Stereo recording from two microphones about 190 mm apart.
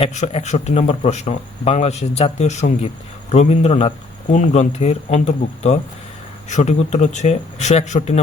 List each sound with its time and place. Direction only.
0.0 s speech: 35° left (ahead or behind)